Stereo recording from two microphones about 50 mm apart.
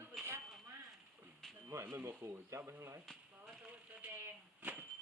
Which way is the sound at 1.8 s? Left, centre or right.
Right.